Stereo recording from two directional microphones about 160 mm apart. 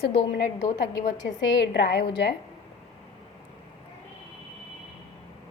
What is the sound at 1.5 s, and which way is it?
Speech, 90° left.